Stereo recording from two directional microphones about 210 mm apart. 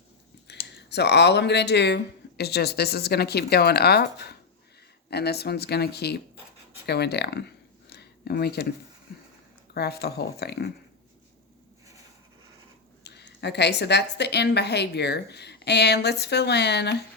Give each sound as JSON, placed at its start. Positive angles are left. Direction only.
{"t": 0.8, "sound": "a woman's voice", "side_deg": 55}
{"t": 6.8, "sound": "a sound", "side_deg": 50}
{"t": 9.7, "sound": "a woman's voice", "side_deg": 50}
{"t": 13.1, "sound": "a woman's voice", "side_deg": 55}